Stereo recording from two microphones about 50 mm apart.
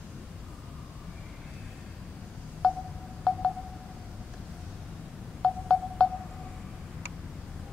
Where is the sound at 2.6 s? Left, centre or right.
Centre.